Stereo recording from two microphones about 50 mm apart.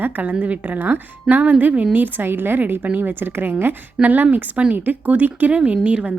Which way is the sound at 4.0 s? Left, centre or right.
Right.